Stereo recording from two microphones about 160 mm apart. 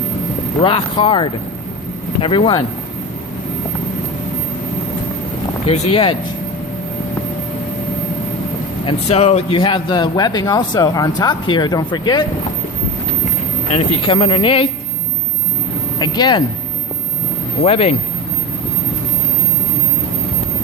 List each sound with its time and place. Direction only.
0.6 s speech: 35° left (ahead or behind)
5.6 s speech: 40° left (ahead or behind)
8.9 s speech: 40° left (ahead or behind)
13.7 s speech: 40° left (ahead or behind)
16.0 s speech: 25° left (ahead or behind)
17.6 s speech: 40° left (ahead or behind)